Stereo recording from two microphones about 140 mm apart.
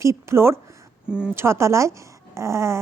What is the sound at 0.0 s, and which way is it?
Speech, 20° right (ahead or behind).